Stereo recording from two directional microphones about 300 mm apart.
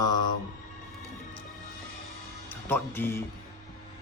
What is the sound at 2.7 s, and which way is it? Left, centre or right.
Speech, centre.